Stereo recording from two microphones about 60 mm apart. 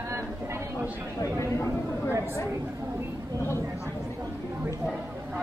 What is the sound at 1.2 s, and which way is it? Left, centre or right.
Speech, left.